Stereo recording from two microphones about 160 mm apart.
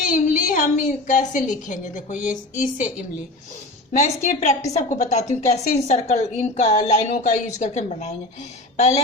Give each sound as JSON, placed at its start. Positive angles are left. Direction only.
{"t": 0.0, "sound": "a woman's voice", "side_deg": 60}
{"t": 3.9, "sound": "a woman's voice", "side_deg": 50}